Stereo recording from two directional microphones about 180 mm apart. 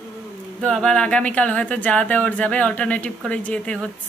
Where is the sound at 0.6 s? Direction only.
5° left (ahead or behind).